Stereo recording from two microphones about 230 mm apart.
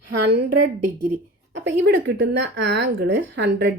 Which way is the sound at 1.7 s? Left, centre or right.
Right.